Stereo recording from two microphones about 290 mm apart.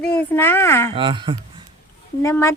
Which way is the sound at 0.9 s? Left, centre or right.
Centre.